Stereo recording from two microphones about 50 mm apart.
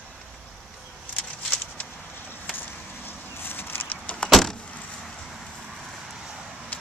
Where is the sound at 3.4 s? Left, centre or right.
Left.